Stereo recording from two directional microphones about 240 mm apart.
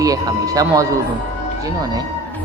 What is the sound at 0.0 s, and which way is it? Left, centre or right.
A woman's voice, centre.